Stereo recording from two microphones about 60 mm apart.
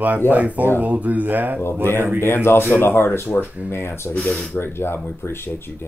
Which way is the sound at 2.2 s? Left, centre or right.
Left.